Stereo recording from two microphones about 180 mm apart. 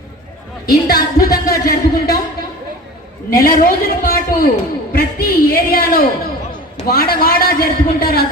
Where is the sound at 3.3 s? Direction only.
55° left (ahead or behind).